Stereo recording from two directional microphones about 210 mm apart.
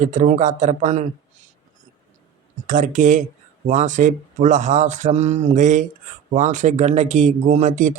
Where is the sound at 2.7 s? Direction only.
35° right (ahead or behind).